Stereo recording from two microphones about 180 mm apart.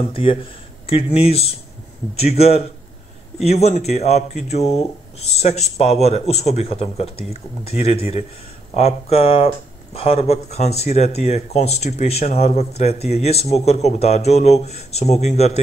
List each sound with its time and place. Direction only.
0.1 s speech: 30° left (ahead or behind)